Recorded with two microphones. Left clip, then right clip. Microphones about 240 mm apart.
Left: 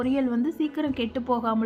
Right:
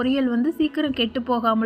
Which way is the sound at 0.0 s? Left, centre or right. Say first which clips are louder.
Right 4 dB; centre.